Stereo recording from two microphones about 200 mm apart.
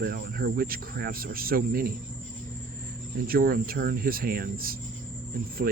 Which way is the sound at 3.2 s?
45° right (ahead or behind).